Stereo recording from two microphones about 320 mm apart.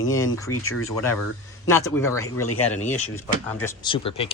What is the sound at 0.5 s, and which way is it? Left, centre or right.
Speech, left.